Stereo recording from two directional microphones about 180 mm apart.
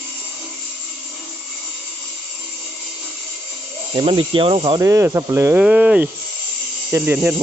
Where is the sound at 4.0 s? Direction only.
30° right (ahead or behind).